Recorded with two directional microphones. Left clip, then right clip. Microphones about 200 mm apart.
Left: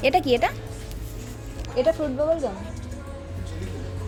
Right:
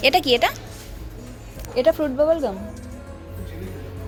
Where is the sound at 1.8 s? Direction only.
15° right (ahead or behind).